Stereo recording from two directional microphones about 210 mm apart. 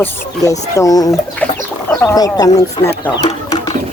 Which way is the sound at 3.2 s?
20° left (ahead or behind).